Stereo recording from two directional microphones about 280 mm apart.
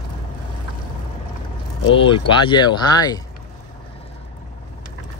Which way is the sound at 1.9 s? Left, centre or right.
Centre.